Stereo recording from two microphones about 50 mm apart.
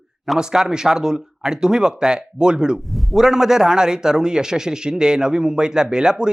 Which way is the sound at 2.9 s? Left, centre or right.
Centre.